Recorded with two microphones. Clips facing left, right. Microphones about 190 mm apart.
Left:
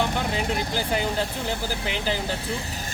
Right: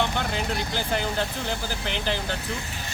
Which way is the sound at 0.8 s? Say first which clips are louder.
Even; 5° left (ahead or behind).